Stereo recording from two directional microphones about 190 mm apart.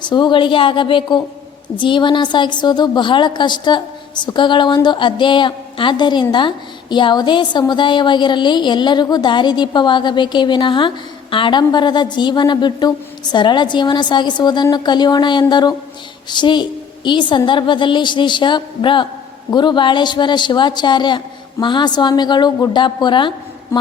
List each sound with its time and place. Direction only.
0.0 s a woman's voice: 25° left (ahead or behind)